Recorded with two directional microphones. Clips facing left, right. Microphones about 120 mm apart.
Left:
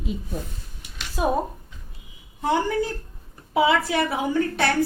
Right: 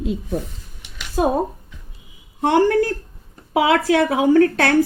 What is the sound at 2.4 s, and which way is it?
A woman's voice, 80° right.